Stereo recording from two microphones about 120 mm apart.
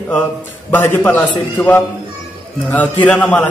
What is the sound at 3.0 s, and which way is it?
Speech, 10° left (ahead or behind).